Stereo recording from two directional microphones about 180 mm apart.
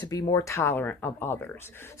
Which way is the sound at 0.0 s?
20° left (ahead or behind).